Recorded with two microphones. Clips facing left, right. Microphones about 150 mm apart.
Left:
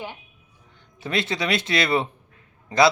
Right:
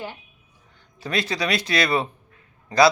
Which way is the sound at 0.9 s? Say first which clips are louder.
Even; 25° left (ahead or behind).